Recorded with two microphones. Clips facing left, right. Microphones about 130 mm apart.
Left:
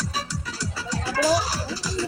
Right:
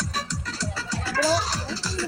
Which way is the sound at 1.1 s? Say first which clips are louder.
Left 2 dB; 15° left (ahead or behind).